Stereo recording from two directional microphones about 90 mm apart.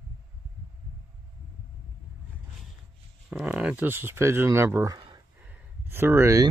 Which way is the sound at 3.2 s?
10° right (ahead or behind).